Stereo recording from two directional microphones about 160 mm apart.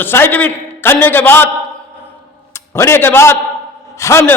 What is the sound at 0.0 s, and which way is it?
A man's voice, 15° left (ahead or behind).